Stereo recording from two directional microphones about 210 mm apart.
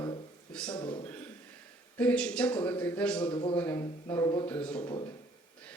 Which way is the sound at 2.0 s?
5° left (ahead or behind).